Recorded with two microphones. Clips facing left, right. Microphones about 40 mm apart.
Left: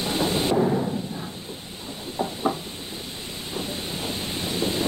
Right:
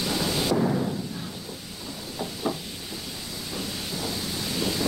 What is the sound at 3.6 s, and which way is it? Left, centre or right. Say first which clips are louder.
Wind noise: left 2 dB; left.